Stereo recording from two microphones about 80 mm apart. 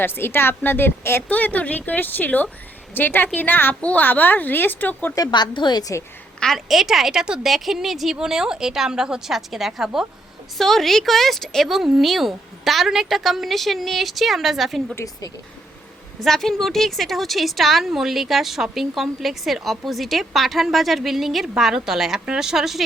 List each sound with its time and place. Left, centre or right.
0.0 s a woman's voice: left
5.3 s a woman's voice: left
6.4 s a woman's voice: centre
16.2 s a woman's voice: centre